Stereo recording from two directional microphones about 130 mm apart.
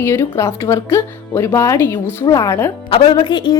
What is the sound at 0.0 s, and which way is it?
A woman's voice, 20° left (ahead or behind).